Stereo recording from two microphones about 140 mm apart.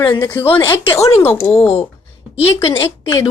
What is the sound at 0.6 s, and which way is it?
Speech, 25° left (ahead or behind).